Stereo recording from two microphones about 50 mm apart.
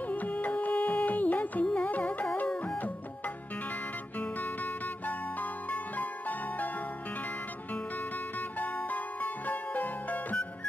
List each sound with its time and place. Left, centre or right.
0.1 s music: left
5.0 s music: left
8.4 s music: left